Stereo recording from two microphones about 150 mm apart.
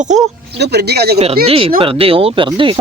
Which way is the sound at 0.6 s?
90° right.